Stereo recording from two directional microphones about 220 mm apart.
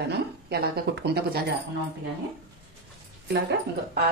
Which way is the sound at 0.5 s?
45° right (ahead or behind).